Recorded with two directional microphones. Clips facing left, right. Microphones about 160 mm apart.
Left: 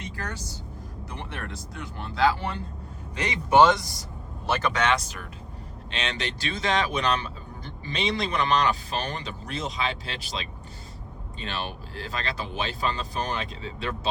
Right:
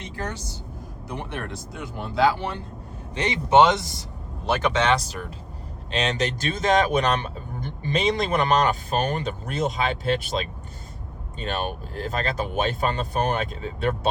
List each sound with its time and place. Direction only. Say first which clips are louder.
0.0 s vehicle: right 3 dB; 25° right (ahead or behind)
1.1 s speech: right 6 dB; 15° right (ahead or behind)
3.2 s speech: right 2 dB; 25° right (ahead or behind)
4.8 s speech: right 3 dB; 35° right (ahead or behind); by 14.1 s 50° right (ahead or behind)